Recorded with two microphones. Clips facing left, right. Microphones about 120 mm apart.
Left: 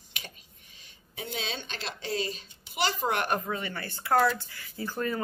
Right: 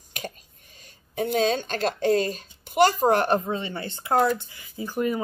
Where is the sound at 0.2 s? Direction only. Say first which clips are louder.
Right 10 dB; 45° right (ahead or behind).